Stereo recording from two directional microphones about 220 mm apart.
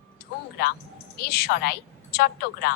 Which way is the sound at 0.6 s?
45° left (ahead or behind).